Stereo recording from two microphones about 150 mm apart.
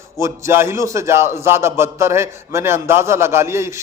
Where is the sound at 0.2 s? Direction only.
20° right (ahead or behind).